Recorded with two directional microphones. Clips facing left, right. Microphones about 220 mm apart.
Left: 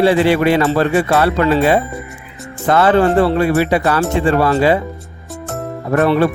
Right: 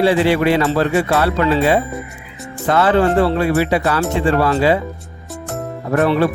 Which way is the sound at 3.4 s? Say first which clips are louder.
Left 2 dB; 55° left (ahead or behind).